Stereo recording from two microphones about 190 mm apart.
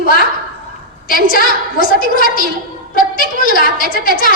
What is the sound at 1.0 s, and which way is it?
A woman's voice, 50° left (ahead or behind).